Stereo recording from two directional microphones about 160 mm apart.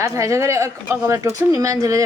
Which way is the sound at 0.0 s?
20° right (ahead or behind).